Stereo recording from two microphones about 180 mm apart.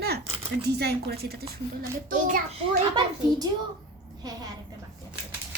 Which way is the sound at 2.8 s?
25° right (ahead or behind).